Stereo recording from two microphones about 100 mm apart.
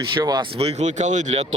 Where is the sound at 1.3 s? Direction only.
85° right.